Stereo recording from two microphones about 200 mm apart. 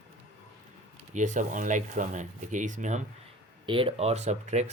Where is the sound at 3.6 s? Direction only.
25° right (ahead or behind).